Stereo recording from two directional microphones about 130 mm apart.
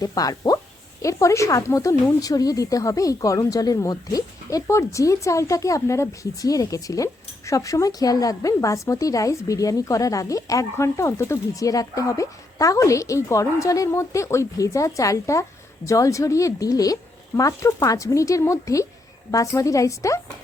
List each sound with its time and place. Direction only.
0.0 s a woman's voice: 30° left (ahead or behind)